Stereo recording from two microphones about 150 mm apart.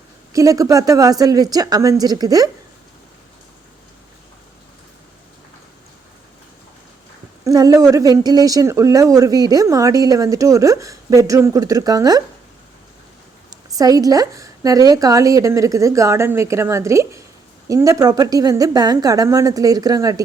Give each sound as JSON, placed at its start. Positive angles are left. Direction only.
{"t": 0.3, "sound": "speech", "side_deg": -25}
{"t": 7.4, "sound": "speech", "side_deg": -25}
{"t": 13.5, "sound": "speech", "side_deg": -25}